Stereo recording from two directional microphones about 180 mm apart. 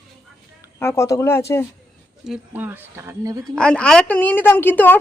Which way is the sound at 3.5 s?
5° left (ahead or behind).